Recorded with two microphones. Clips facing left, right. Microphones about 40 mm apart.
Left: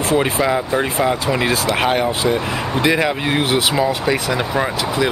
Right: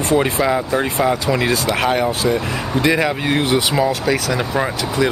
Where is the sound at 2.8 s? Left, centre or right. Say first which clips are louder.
Even; centre.